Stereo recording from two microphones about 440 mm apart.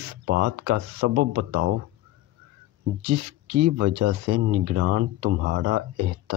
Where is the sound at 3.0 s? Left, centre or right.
Right.